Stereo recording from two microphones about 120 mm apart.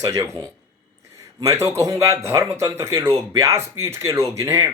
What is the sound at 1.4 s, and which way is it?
Speech, 25° right (ahead or behind).